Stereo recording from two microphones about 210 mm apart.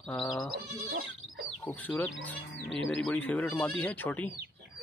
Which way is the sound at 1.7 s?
5° left (ahead or behind).